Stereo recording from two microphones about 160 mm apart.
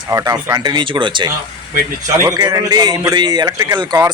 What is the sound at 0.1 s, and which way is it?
A man's voice, 20° right (ahead or behind).